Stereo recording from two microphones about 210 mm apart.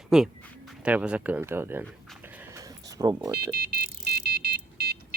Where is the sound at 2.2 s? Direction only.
10° right (ahead or behind).